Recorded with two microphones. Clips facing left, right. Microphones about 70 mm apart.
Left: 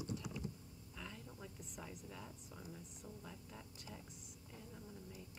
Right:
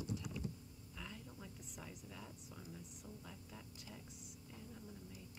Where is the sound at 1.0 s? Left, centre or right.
Centre.